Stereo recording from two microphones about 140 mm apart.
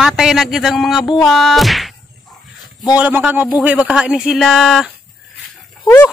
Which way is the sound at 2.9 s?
10° right (ahead or behind).